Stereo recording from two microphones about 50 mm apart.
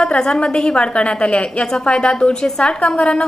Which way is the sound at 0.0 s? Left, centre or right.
Centre.